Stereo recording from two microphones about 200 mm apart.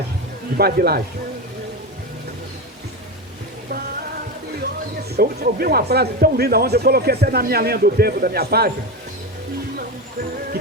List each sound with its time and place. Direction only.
0.5 s speech: 50° right (ahead or behind)
5.1 s speech: 50° right (ahead or behind)